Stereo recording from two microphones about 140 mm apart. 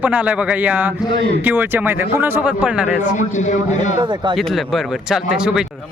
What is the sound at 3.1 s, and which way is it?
Speech, 60° left (ahead or behind).